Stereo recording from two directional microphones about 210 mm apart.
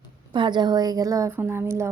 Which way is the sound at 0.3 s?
20° right (ahead or behind).